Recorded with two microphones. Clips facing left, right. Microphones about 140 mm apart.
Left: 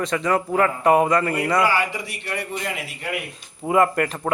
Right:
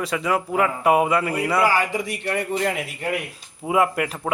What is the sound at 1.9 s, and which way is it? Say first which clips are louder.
Speech: right 5 dB; 45° right (ahead or behind).